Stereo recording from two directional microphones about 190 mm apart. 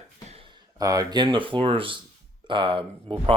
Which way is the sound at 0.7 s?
20° right (ahead or behind).